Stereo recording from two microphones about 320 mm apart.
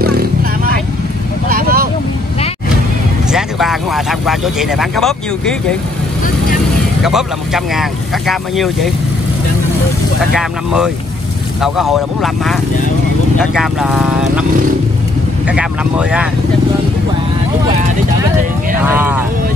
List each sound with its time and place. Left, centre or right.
0.0 s vehicle: right
3.3 s speech: centre
7.0 s speech: centre
10.3 s speech: centre
13.6 s speech: centre
15.4 s speech: centre
18.8 s speech: centre